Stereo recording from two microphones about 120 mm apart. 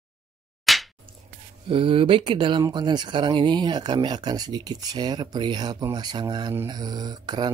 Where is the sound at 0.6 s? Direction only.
Centre (ahead or behind).